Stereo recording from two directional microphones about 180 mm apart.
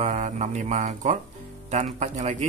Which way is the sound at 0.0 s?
40° right (ahead or behind).